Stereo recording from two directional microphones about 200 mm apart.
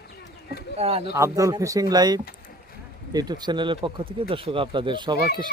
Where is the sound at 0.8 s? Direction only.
30° right (ahead or behind).